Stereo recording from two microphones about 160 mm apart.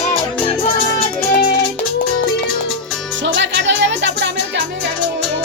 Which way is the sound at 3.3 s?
90° right.